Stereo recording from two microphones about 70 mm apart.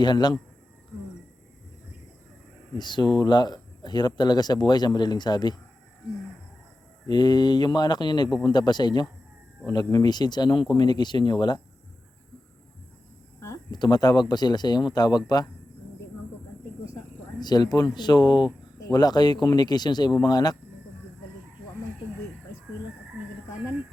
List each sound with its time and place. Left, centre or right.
0.0 s speech: left
2.7 s speech: left
7.1 s speech: left
13.7 s speech: left
17.4 s speech: left